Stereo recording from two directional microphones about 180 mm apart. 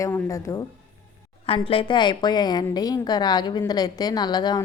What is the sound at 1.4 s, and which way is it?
A woman's voice, 30° left (ahead or behind).